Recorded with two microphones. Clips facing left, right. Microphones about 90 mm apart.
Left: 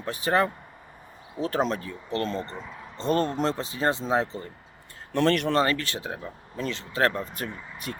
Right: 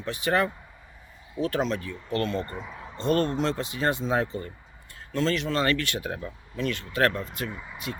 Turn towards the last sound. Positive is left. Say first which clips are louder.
# right 1 dB
turn(degrees=-10)  # may be behind; listen again after turning